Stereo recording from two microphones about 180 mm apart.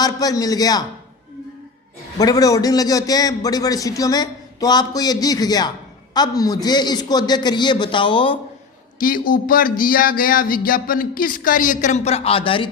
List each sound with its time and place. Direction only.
0.0 s a man's voice: 20° left (ahead or behind)
2.1 s a man's voice: 20° left (ahead or behind)
9.0 s speech: 50° left (ahead or behind); by 12.7 s 30° left (ahead or behind)